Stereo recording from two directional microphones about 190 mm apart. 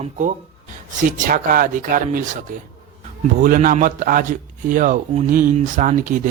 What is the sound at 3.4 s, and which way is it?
A man's voice, 45° right (ahead or behind).